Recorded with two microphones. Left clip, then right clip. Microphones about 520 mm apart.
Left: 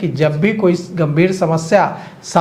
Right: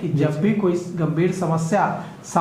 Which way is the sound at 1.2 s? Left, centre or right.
Left.